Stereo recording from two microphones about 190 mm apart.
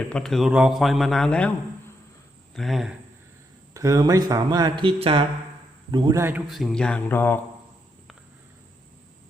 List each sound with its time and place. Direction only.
0.1 s a man's voice: centre (ahead or behind)
2.6 s a man's voice: centre (ahead or behind)
3.8 s a man's voice: 15° right (ahead or behind)
6.5 s a man's voice: centre (ahead or behind)